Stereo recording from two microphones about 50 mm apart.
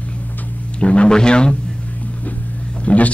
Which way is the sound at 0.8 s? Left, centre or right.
Left.